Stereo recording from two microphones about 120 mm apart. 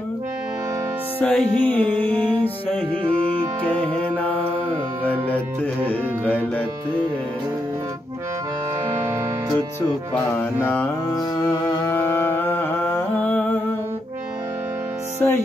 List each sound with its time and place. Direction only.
1.2 s music: 10° left (ahead or behind)
11.1 s music: 25° left (ahead or behind)
15.2 s music: 15° left (ahead or behind)